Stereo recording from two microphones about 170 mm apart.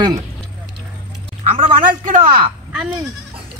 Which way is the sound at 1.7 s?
50° right (ahead or behind).